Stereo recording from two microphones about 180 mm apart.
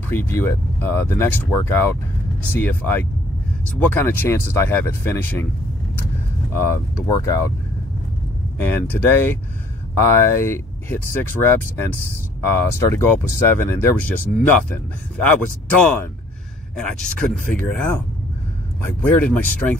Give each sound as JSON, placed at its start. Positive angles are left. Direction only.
{"t": 0.1, "sound": "speech", "side_deg": 10}
{"t": 6.6, "sound": "speech", "side_deg": 15}
{"t": 8.5, "sound": "speech", "side_deg": 10}
{"t": 15.8, "sound": "speech", "side_deg": 10}